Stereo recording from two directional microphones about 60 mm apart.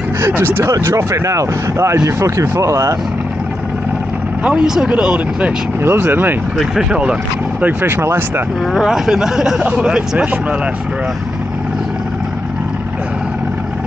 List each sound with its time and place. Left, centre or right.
0.4 s speech: right
0.7 s speech: right
4.6 s speech: centre
5.9 s speech: right
6.6 s speech: centre
7.6 s speech: right
8.7 s speech: centre